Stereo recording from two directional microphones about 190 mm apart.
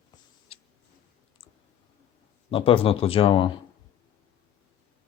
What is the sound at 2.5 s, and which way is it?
Speech, 30° left (ahead or behind).